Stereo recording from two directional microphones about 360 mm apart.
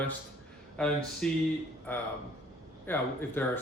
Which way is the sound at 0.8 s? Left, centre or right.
Centre.